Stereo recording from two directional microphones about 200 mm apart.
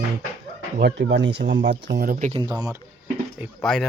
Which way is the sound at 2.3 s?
20° right (ahead or behind).